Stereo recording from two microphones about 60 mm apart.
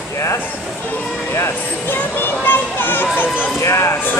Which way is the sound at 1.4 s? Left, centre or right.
Left.